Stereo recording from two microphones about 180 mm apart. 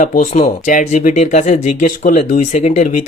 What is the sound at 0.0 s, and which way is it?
Speech, 45° left (ahead or behind).